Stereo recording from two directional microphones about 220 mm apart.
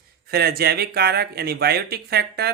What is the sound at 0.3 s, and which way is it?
Speech, 45° right (ahead or behind).